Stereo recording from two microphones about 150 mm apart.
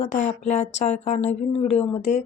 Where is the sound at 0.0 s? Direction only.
50° left (ahead or behind).